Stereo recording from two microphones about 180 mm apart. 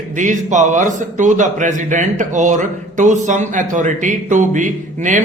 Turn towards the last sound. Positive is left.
turn(degrees=-45)  # may be behind; listen again after turning